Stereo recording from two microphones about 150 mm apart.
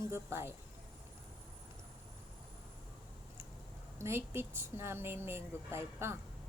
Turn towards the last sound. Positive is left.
turn(degrees=-15)  # may be behind; listen again after turning